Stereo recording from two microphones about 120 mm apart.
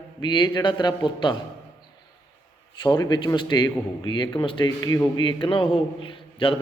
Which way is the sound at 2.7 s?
40° left (ahead or behind).